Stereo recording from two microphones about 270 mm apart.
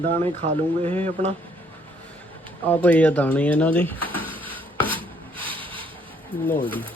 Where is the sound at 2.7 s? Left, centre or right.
Centre.